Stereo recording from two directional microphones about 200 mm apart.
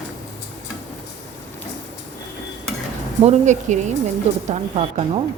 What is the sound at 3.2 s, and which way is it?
Speech, 35° right (ahead or behind).